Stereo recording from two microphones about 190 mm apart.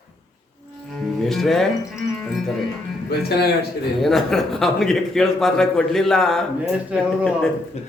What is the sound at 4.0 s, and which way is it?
A man's voice, centre (ahead or behind).